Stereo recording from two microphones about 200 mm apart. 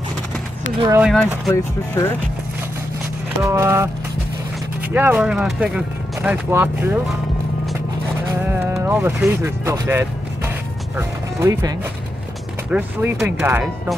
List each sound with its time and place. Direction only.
0.7 s speech: 15° right (ahead or behind)
1.0 s speech: centre (ahead or behind)
1.5 s speech: 10° left (ahead or behind)
3.4 s speech: 15° right (ahead or behind)
4.9 s speech: 10° right (ahead or behind)
8.3 s a sound: 10° right (ahead or behind)
11.0 s speech: 15° right (ahead or behind)
12.7 s speech: 10° right (ahead or behind)